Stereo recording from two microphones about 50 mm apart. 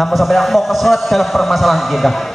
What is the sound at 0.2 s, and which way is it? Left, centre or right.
Speech, centre.